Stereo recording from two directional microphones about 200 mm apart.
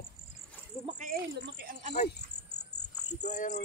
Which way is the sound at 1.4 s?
55° right (ahead or behind).